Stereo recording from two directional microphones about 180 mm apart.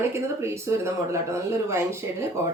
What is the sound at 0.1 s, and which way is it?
Speech, 15° right (ahead or behind).